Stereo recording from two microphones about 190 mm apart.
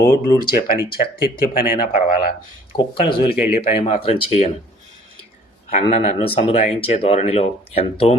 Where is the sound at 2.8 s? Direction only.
30° left (ahead or behind).